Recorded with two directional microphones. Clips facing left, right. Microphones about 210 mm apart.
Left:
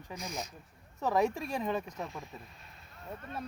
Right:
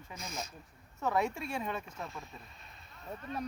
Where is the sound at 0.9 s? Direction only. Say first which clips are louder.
Left 2 dB; 35° left (ahead or behind).